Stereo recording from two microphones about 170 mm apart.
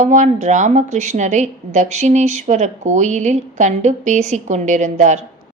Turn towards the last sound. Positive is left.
turn(degrees=-45)  # may be behind; listen again after turning